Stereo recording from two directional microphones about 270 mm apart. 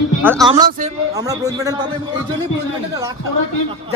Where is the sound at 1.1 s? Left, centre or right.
Centre.